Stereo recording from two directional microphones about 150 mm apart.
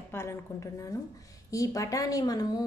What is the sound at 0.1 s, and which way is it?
A woman's voice, 15° left (ahead or behind).